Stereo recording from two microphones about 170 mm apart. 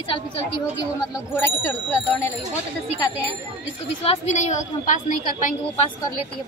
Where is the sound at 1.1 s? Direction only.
15° left (ahead or behind).